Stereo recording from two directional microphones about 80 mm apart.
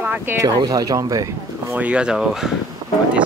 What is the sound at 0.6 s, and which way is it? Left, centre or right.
Speech, right.